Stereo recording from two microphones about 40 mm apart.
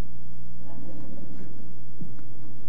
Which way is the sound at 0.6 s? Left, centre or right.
Left.